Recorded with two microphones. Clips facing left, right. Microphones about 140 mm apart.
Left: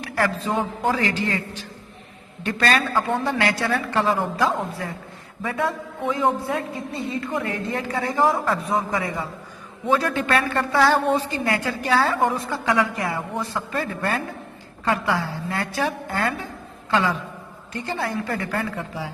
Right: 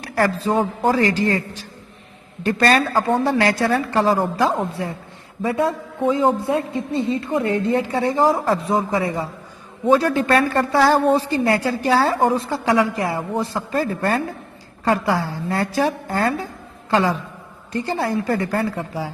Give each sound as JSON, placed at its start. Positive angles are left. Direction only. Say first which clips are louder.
{"t": 0.0, "sound": "a woman's voice", "louder": "right 4 dB", "side_deg": -40}